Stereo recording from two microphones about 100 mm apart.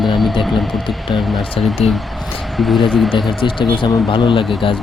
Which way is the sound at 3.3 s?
55° left (ahead or behind).